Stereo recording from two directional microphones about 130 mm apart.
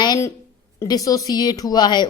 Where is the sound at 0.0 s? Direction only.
30° left (ahead or behind).